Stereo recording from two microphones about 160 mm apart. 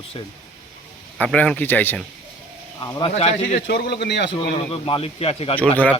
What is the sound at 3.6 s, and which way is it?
Speech, 90° left.